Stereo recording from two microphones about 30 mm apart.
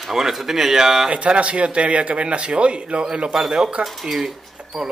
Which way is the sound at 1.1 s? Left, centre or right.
Right.